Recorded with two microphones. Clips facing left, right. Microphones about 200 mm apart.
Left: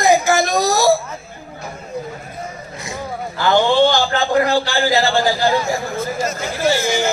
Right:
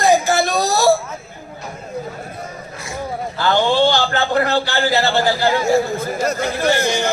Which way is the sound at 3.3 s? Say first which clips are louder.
Left 2 dB; 15° left (ahead or behind).